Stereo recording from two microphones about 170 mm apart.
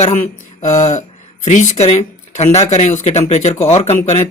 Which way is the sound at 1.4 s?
40° left (ahead or behind).